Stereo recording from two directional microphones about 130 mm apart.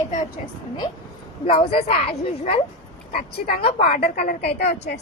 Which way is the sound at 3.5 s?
50° left (ahead or behind).